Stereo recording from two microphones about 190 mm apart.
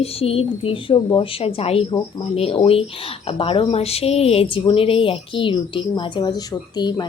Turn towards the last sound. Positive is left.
turn(degrees=20)  # may be behind; listen again after turning